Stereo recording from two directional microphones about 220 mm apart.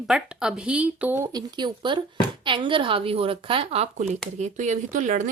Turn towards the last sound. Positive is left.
turn(degrees=-35)  # may be behind; listen again after turning